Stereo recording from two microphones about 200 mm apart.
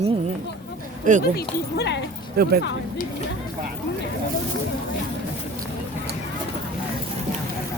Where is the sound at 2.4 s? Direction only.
50° right (ahead or behind).